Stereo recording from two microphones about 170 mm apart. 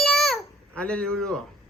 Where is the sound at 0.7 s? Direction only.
5° left (ahead or behind).